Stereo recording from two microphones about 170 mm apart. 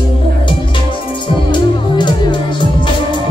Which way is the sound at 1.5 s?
25° left (ahead or behind).